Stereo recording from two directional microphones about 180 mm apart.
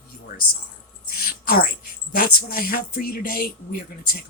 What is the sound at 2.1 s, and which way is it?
Speech, 55° left (ahead or behind).